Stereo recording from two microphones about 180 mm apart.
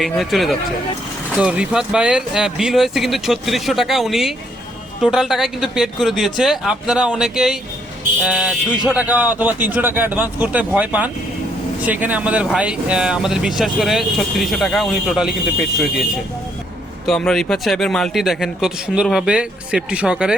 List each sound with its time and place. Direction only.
0.0 s speech: centre (ahead or behind)
17.1 s speech: centre (ahead or behind)